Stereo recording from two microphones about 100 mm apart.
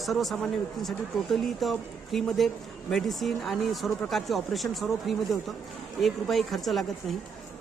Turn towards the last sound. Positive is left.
turn(degrees=0)  # may be behind; listen again after turning